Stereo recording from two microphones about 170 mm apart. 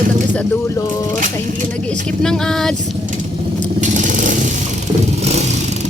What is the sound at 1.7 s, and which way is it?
Speech, 5° left (ahead or behind).